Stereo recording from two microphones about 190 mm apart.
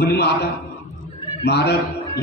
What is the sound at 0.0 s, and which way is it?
A man's voice, 60° left (ahead or behind).